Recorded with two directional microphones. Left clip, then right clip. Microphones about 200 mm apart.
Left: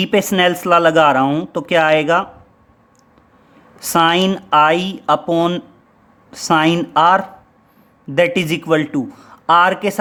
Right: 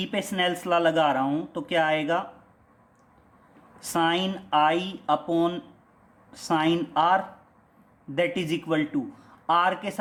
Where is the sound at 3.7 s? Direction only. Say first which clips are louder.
Left 11 dB; 40° left (ahead or behind).